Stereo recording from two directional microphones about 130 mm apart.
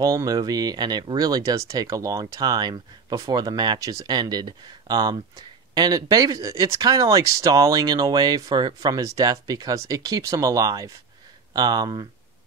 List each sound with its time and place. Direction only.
0.0 s speech: 25° right (ahead or behind)